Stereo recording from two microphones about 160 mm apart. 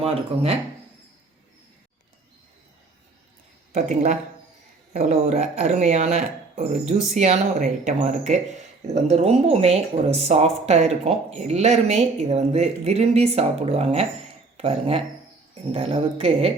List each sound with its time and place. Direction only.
0.0 s speech: 40° right (ahead or behind)
3.8 s speech: 50° right (ahead or behind)